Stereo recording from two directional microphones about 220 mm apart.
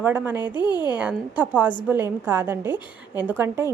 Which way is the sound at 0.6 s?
20° left (ahead or behind).